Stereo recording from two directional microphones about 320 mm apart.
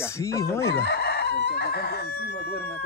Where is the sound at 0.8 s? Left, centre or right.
Left.